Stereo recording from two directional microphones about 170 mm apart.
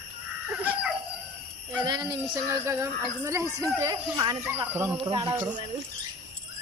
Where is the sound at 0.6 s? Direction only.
10° right (ahead or behind).